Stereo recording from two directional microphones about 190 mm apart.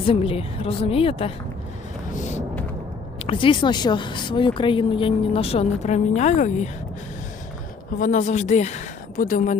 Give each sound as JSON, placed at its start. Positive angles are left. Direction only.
{"t": 0.0, "sound": "a woman's voice", "side_deg": 30}
{"t": 3.2, "sound": "speech", "side_deg": 25}
{"t": 7.9, "sound": "a woman's voice", "side_deg": 45}